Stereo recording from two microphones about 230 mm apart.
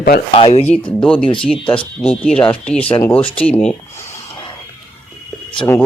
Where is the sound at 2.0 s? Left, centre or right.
Centre.